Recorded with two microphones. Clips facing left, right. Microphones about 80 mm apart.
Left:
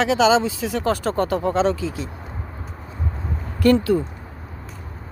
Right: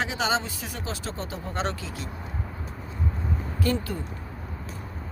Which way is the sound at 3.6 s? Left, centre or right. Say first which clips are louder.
Left 12 dB; left.